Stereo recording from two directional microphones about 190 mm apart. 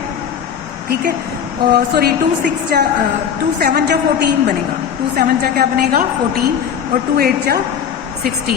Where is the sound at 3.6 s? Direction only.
50° right (ahead or behind).